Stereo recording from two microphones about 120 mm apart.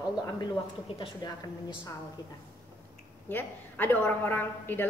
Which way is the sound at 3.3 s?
15° left (ahead or behind).